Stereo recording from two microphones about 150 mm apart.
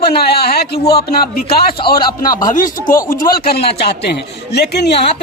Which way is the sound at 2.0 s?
25° left (ahead or behind).